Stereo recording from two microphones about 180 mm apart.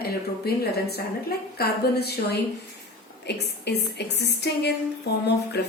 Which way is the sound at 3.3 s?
70° left (ahead or behind).